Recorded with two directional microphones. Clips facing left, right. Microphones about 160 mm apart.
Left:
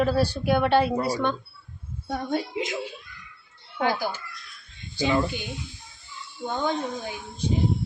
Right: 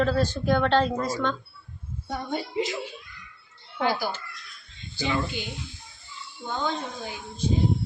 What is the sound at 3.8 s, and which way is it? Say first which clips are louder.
Speech: left 1 dB; 15° left (ahead or behind).